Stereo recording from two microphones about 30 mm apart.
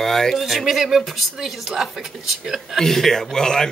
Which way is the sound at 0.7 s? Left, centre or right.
Centre.